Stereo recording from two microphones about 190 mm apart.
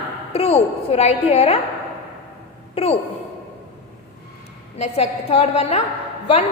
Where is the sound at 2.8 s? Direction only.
30° left (ahead or behind).